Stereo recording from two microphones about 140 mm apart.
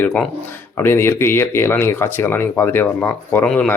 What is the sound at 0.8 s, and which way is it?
A man's voice, 15° left (ahead or behind).